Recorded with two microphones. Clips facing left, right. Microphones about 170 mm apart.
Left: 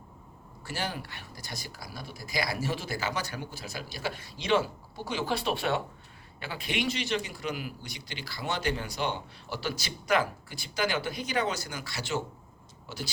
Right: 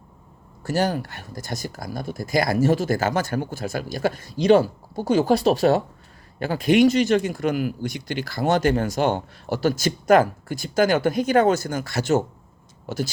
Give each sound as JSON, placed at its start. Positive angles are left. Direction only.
{"t": 0.6, "sound": "a man's voice", "side_deg": -40}